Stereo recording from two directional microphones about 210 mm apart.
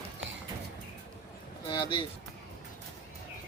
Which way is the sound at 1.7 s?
25° left (ahead or behind).